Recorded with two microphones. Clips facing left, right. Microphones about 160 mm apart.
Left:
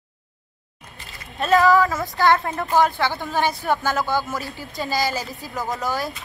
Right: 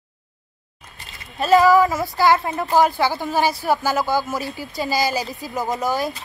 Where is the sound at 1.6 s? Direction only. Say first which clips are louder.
Right 1 dB; 20° right (ahead or behind).